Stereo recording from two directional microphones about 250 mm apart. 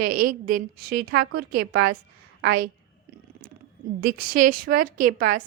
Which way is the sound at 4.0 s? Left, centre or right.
Right.